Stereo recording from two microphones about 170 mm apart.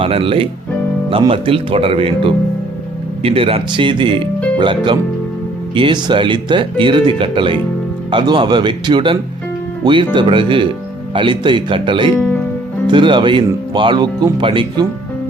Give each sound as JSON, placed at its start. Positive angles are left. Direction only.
{"t": 0.0, "sound": "speech", "side_deg": -30}
{"t": 12.1, "sound": "speech", "side_deg": 10}
{"t": 12.9, "sound": "speech", "side_deg": -30}